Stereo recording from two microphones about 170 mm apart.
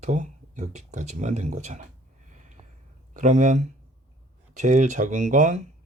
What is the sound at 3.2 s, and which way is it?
Speech, 45° right (ahead or behind).